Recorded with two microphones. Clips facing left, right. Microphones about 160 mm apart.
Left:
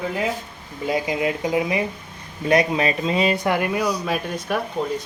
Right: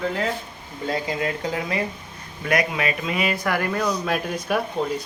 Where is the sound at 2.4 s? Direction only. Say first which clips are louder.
Left 4 dB; 30° left (ahead or behind); by 4.1 s 10° left (ahead or behind).